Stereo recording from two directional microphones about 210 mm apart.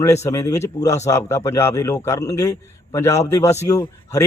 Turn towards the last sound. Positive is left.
turn(degrees=15)  # may be behind; listen again after turning